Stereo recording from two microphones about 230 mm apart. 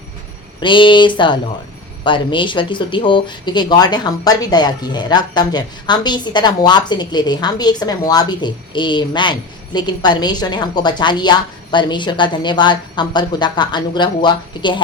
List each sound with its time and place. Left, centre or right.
0.6 s speech: left